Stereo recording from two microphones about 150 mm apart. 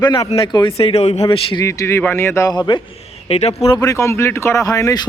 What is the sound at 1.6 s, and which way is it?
Speech, 20° left (ahead or behind).